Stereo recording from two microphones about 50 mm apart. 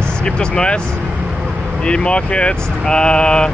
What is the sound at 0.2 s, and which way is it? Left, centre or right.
Speech, centre.